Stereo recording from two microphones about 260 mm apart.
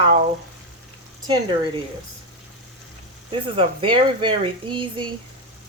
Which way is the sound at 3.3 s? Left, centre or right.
Centre.